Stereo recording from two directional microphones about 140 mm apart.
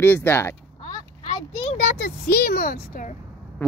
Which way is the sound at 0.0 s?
15° left (ahead or behind).